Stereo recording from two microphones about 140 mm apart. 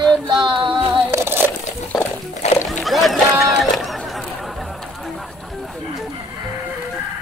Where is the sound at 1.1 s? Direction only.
15° right (ahead or behind).